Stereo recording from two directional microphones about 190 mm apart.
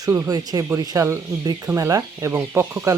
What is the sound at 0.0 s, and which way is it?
Speech, 15° right (ahead or behind).